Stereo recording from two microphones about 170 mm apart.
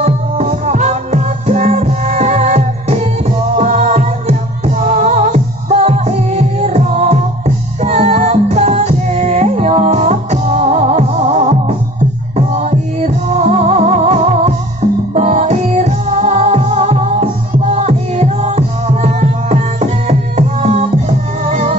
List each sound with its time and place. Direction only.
0.0 s music: 45° right (ahead or behind)